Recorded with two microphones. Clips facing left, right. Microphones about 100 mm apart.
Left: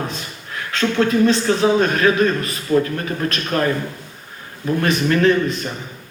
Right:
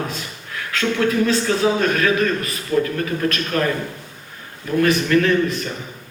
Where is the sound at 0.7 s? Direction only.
30° left (ahead or behind).